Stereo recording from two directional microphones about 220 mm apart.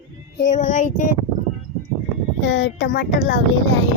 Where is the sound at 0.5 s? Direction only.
35° left (ahead or behind).